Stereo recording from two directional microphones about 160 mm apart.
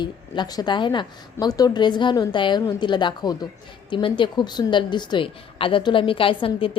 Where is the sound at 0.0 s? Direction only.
25° left (ahead or behind).